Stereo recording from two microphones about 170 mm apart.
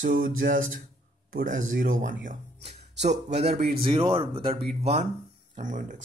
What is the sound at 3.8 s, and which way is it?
Speech, 30° right (ahead or behind).